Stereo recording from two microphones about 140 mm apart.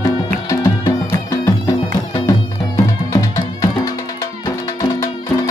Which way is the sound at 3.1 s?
25° left (ahead or behind).